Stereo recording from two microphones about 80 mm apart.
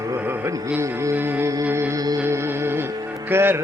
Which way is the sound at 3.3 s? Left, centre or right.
Right.